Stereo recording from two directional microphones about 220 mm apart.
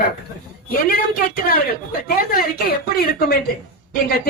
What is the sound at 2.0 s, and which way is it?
Speech, 40° left (ahead or behind).